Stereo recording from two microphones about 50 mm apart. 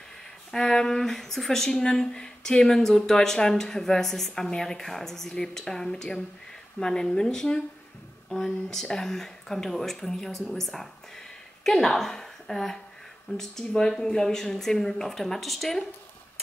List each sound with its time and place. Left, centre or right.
0.5 s speech: centre